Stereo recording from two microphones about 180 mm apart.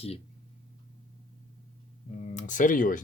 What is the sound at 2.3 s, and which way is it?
Speech, 45° left (ahead or behind).